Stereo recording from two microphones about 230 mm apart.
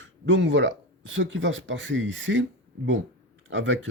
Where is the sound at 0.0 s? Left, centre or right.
Right.